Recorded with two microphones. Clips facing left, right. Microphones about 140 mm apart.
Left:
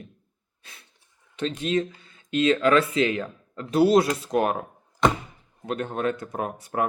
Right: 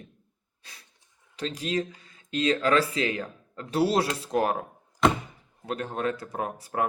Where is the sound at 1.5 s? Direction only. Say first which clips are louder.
Left 4 dB; 35° right (ahead or behind).